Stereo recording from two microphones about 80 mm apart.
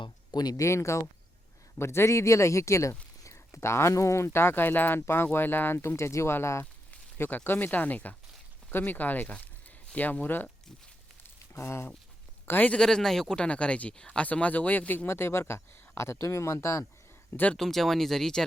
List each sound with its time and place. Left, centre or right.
0.0 s a sound: left
0.6 s speech: left
11.5 s speech: left
12.5 s speech: left
12.8 s speech: centre; by 16.8 s left
17.5 s speech: centre